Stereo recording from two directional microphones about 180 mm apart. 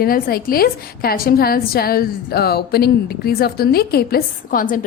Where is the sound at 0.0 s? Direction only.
55° left (ahead or behind).